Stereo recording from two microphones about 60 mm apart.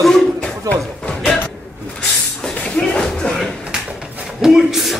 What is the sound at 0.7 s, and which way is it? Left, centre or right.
Speech, centre.